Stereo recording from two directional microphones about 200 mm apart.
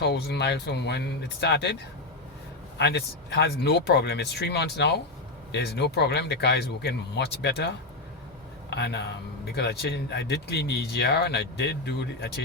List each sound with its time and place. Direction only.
0.0 s speech: 55° left (ahead or behind)
8.7 s speech: 60° left (ahead or behind)